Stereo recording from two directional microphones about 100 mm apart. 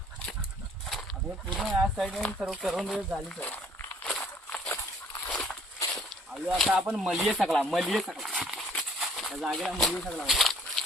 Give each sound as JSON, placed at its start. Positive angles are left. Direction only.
{"t": 1.5, "sound": "speech", "side_deg": 0}
{"t": 2.0, "sound": "speech", "side_deg": 10}
{"t": 2.4, "sound": "speech", "side_deg": 0}
{"t": 3.4, "sound": "walk", "side_deg": 15}
{"t": 5.3, "sound": "a sound", "side_deg": 10}
{"t": 6.6, "sound": "speech", "side_deg": -5}